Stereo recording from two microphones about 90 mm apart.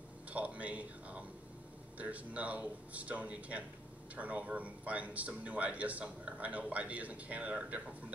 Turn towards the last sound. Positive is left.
turn(degrees=-15)  # may be behind; listen again after turning